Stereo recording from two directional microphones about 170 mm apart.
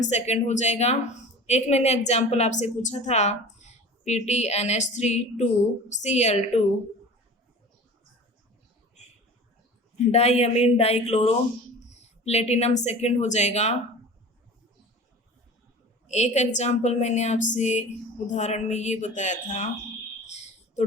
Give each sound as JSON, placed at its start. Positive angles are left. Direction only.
{"t": 0.0, "sound": "a woman's voice", "side_deg": 40}
{"t": 10.1, "sound": "a woman's voice", "side_deg": 40}
{"t": 16.0, "sound": "a woman's voice", "side_deg": 40}